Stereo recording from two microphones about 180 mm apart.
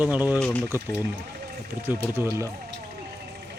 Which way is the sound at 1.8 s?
10° right (ahead or behind).